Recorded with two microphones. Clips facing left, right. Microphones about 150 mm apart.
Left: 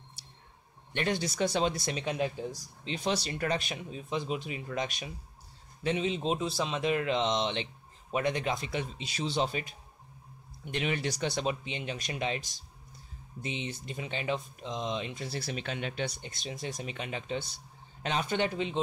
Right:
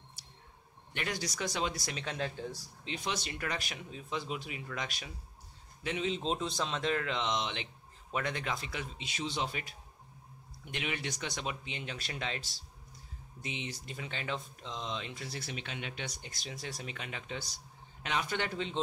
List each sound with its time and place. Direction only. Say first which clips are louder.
0.9 s speech: left 7 dB; 30° left (ahead or behind)
2.9 s speech: left 6 dB; 30° left (ahead or behind)
8.9 s speech: left 3 dB; 35° left (ahead or behind)
10.7 s speech: left 6 dB; 35° left (ahead or behind); by 15.2 s 20° left (ahead or behind)
15.2 s speech: left 6 dB; 35° left (ahead or behind)
16.2 s speech: left 5 dB; 25° left (ahead or behind)